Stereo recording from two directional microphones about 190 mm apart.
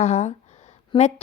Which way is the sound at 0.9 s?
25° left (ahead or behind).